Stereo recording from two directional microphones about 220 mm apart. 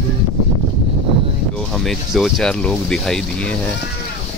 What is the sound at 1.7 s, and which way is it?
Speech, centre (ahead or behind).